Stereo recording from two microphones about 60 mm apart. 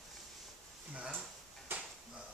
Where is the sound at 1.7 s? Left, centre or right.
Right.